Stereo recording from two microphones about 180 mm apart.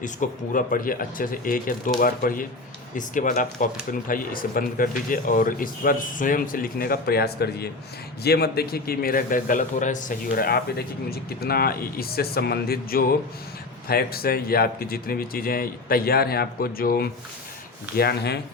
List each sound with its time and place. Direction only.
0.0 s a man's voice: 45° left (ahead or behind); by 18.3 s 65° left (ahead or behind)